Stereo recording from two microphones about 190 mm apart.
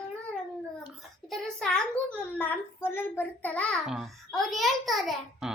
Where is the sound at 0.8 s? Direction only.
Centre (ahead or behind).